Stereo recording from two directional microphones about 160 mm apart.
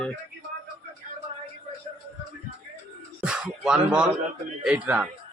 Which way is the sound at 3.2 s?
5° right (ahead or behind).